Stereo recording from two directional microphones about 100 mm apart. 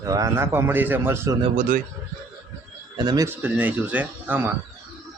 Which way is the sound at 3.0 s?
40° right (ahead or behind).